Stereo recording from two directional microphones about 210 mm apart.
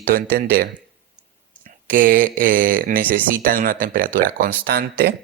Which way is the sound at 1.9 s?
40° right (ahead or behind).